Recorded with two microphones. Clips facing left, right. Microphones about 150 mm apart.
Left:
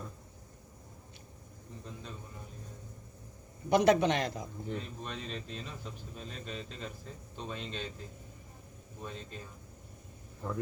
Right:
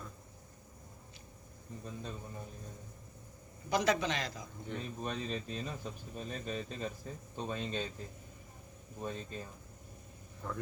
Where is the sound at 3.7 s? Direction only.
55° left (ahead or behind).